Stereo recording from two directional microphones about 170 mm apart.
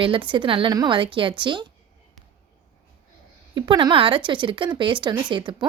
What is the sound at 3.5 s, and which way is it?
Speech, 30° right (ahead or behind).